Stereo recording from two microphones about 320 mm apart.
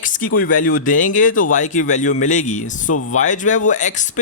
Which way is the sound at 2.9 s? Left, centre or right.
Left.